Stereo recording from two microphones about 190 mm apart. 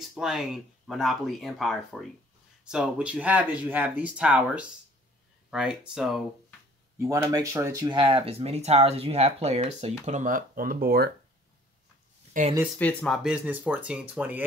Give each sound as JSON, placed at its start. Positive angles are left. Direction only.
{"t": 0.0, "sound": "speech", "side_deg": 0}
{"t": 7.0, "sound": "speech", "side_deg": -15}
{"t": 12.4, "sound": "speech", "side_deg": -45}
{"t": 12.7, "sound": "speech", "side_deg": 5}